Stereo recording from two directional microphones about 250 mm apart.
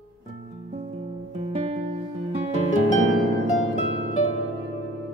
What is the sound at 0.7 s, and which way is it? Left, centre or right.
Music, right.